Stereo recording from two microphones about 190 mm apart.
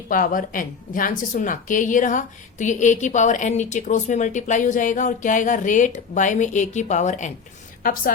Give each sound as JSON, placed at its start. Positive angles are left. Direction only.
{"t": 0.1, "sound": "a woman's voice", "side_deg": 45}